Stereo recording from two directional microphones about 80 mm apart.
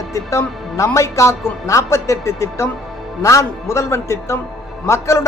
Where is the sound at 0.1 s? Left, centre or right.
Left.